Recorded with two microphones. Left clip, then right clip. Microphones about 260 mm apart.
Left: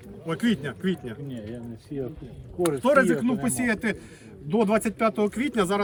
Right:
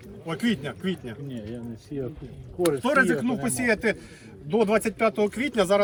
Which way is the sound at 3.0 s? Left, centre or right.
Centre.